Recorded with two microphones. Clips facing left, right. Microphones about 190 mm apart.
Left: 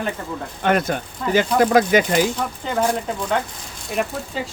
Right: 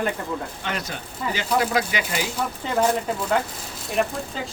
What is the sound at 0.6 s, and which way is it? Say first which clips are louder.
Speech: left 11 dB; 55° left (ahead or behind).